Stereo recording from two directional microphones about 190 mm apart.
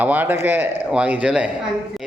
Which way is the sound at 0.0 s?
10° right (ahead or behind).